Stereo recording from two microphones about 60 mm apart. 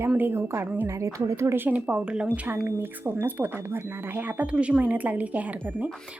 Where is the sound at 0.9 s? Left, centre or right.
Right.